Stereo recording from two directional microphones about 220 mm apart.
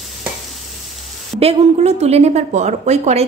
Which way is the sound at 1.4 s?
30° right (ahead or behind).